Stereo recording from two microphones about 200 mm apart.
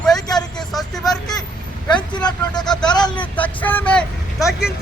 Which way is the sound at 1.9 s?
20° left (ahead or behind).